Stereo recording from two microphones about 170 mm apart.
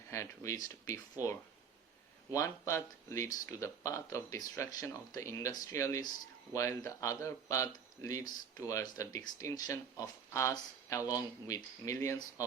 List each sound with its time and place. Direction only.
0.1 s speech: 15° left (ahead or behind)